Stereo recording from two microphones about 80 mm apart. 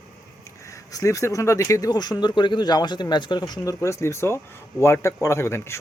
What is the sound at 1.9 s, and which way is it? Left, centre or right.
Speech, left.